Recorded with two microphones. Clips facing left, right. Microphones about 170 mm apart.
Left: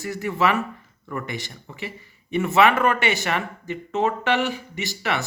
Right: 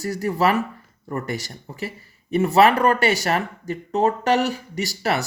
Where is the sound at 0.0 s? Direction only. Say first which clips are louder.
Right 2 dB; 40° right (ahead or behind).